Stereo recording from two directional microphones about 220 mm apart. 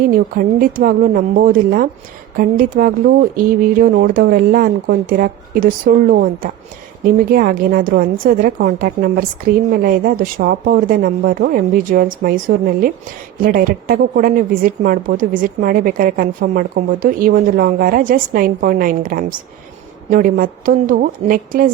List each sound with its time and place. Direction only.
0.1 s a woman's voice: 40° right (ahead or behind)